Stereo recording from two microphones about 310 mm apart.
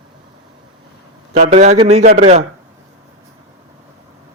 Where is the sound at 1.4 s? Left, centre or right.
Right.